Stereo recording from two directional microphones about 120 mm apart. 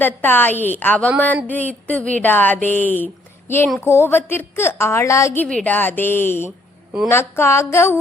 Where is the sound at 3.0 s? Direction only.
20° left (ahead or behind).